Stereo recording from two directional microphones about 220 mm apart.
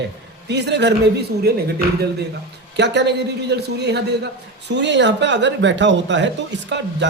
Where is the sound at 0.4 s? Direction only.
50° right (ahead or behind).